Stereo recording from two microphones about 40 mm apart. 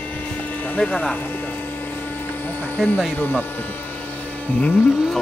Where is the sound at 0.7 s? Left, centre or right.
Left.